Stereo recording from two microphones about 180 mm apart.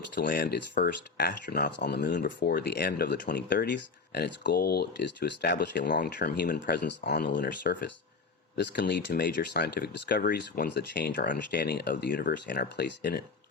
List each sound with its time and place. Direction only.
0.1 s speech: 60° left (ahead or behind)
2.0 s speech: 50° left (ahead or behind); by 5.8 s 70° left (ahead or behind)
5.8 s speech: 50° left (ahead or behind)
6.1 s speech: 60° left (ahead or behind)
7.6 s speech: 55° left (ahead or behind)
8.5 s speech: 75° left (ahead or behind)
10.2 s speech: 50° left (ahead or behind)
10.7 s speech: 65° left (ahead or behind)